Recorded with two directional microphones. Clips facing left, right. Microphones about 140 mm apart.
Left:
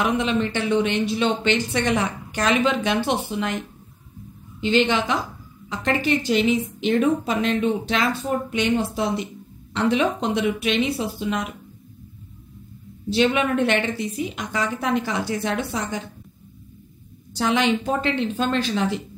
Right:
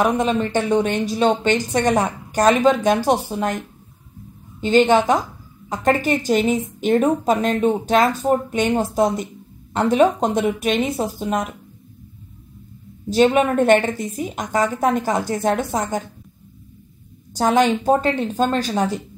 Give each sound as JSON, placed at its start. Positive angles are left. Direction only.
{"t": 0.0, "sound": "speech", "side_deg": -40}
{"t": 13.1, "sound": "speech", "side_deg": -45}
{"t": 17.3, "sound": "speech", "side_deg": -45}